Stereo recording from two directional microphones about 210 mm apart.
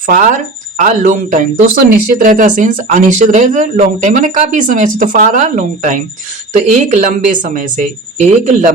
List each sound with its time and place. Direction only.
0.0 s speech: 40° right (ahead or behind)